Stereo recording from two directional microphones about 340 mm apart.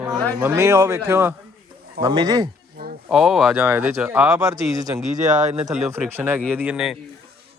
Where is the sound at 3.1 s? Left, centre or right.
Centre.